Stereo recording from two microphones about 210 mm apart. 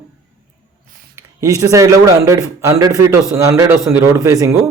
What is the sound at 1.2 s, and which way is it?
A man's voice, 15° right (ahead or behind).